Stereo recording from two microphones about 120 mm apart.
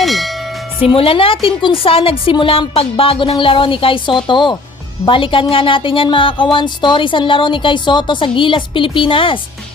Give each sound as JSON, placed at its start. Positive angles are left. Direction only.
{"t": 0.0, "sound": "church bell", "side_deg": 0}
{"t": 0.8, "sound": "speech", "side_deg": 50}